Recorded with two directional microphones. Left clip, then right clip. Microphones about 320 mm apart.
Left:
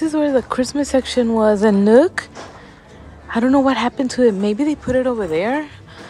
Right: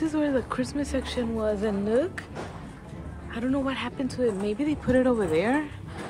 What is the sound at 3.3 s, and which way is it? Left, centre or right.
Speech, centre.